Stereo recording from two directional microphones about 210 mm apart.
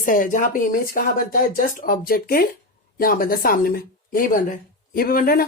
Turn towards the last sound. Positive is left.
turn(degrees=45)  # may be behind; listen again after turning